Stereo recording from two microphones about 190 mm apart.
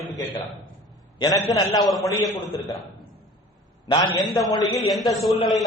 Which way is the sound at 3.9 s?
25° left (ahead or behind).